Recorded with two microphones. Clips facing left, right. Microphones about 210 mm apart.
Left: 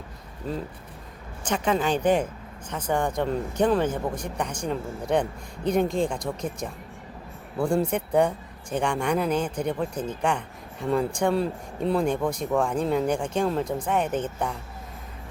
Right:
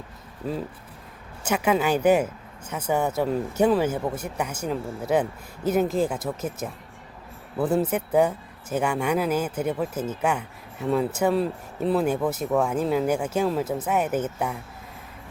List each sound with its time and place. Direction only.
0.4 s speech: 5° right (ahead or behind)